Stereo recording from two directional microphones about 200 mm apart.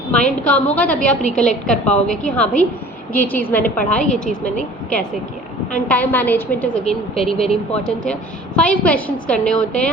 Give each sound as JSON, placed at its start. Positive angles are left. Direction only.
{"t": 0.4, "sound": "a woman's voice", "side_deg": 5}
{"t": 6.8, "sound": "speech", "side_deg": 30}
{"t": 7.5, "sound": "a woman's voice", "side_deg": 5}